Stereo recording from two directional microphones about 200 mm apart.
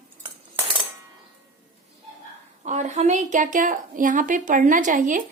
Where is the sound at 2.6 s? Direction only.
35° right (ahead or behind).